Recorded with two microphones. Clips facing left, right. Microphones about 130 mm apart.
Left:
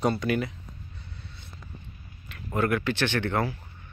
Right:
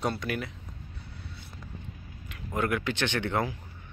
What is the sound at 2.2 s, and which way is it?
Speech, 15° right (ahead or behind).